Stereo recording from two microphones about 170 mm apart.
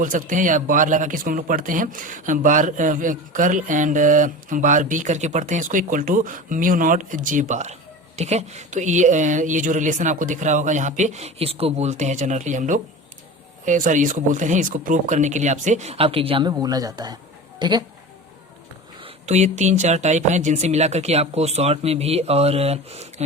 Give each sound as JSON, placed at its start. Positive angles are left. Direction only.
{"t": 0.0, "sound": "a man's voice", "side_deg": -50}
{"t": 19.0, "sound": "speech", "side_deg": -40}